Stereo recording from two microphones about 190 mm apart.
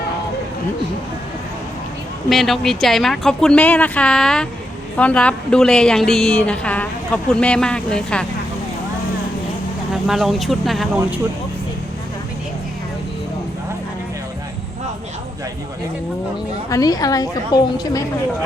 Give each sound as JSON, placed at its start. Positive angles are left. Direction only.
{"t": 2.3, "sound": "a woman's voice", "side_deg": 0}
{"t": 9.9, "sound": "a woman's voice", "side_deg": 0}
{"t": 16.6, "sound": "a woman's voice", "side_deg": 20}